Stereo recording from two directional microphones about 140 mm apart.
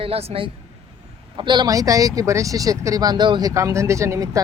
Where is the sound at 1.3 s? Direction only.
35° right (ahead or behind).